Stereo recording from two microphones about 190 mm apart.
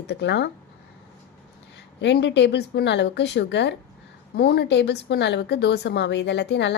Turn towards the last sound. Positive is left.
turn(degrees=65)  # may be behind; listen again after turning